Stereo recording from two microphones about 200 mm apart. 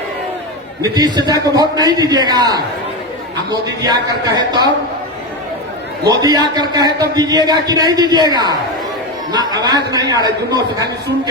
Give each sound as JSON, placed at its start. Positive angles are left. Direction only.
{"t": 0.8, "sound": "a man's voice", "side_deg": -20}
{"t": 3.8, "sound": "a man's voice", "side_deg": -20}
{"t": 6.1, "sound": "a man's voice", "side_deg": -20}